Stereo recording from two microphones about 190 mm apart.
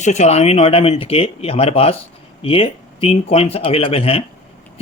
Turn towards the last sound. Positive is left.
turn(degrees=30)  # may be behind; listen again after turning